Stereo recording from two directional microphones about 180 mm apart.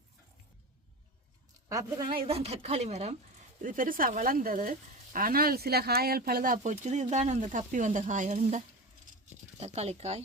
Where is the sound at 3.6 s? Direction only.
50° right (ahead or behind).